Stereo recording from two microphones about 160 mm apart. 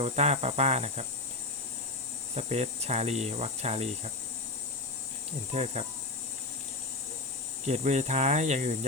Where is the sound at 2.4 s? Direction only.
40° right (ahead or behind).